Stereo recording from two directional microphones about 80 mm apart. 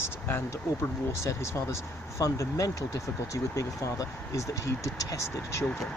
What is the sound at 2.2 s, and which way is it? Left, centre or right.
Speech, left.